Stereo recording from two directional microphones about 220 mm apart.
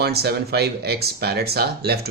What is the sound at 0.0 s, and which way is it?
Speech, 45° right (ahead or behind).